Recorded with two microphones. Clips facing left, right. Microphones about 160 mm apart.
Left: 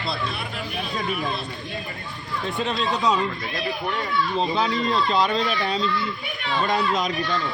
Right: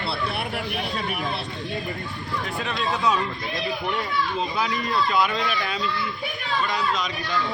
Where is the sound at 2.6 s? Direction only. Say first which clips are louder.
Left 2 dB; 25° left (ahead or behind).